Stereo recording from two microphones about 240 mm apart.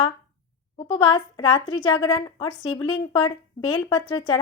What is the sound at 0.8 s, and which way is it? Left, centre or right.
A woman's voice, left.